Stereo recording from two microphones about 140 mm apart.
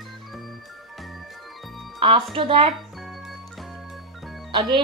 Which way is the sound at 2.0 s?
35° right (ahead or behind).